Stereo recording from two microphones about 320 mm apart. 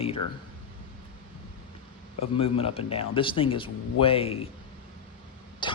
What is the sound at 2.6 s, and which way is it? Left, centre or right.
Speech, centre.